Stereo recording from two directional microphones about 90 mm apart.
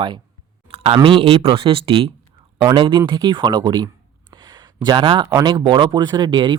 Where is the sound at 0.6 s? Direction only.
80° right.